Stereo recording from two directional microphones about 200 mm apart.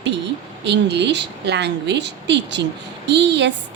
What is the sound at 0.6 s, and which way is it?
A woman's voice, 60° right (ahead or behind).